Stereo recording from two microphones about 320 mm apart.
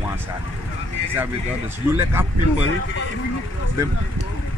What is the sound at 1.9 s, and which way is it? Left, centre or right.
Speech, centre.